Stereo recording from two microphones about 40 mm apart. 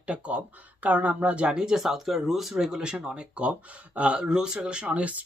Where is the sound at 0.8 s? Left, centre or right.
Right.